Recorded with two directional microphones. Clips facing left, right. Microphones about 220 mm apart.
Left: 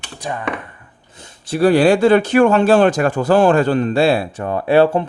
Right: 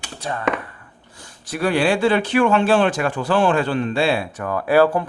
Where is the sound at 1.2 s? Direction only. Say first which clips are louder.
Left 8 dB; 30° left (ahead or behind).